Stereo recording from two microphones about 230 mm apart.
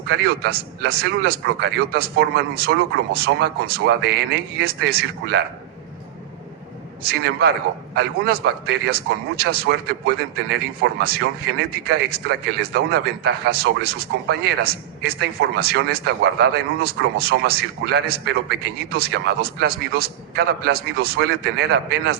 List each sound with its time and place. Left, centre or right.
0.1 s speech: right
7.0 s speech: right